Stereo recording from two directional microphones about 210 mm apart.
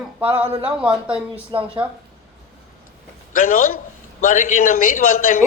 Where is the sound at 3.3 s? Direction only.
40° left (ahead or behind).